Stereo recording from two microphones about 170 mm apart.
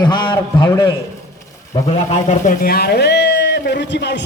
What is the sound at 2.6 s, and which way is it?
A man's voice, 65° left (ahead or behind).